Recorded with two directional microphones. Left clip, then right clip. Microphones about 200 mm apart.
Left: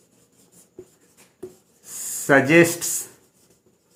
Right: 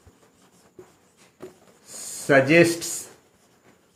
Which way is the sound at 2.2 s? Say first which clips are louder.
Left 1 dB; 40° left (ahead or behind).